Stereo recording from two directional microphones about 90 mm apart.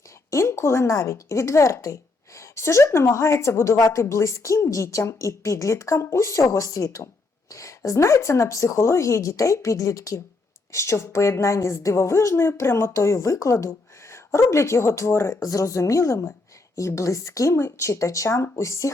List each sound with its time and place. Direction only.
0.3 s a woman's voice: 35° left (ahead or behind)